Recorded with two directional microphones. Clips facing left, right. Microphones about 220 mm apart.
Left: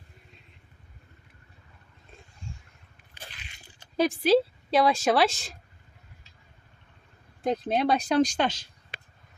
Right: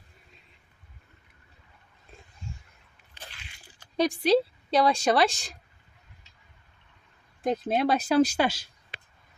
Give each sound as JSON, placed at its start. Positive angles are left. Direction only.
{"t": 3.9, "sound": "a woman's voice", "side_deg": 5}
{"t": 7.4, "sound": "a woman's voice", "side_deg": 0}